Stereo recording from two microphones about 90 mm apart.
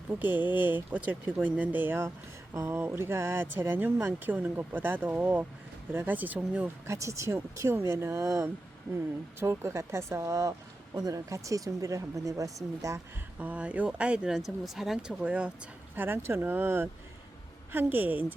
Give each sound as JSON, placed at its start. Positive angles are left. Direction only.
{"t": 0.1, "sound": "speech", "side_deg": -20}
{"t": 6.8, "sound": "speech", "side_deg": -35}
{"t": 13.4, "sound": "speech", "side_deg": -15}
{"t": 16.0, "sound": "speech", "side_deg": -25}